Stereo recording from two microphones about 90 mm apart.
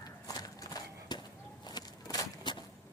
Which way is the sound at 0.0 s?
45° left (ahead or behind).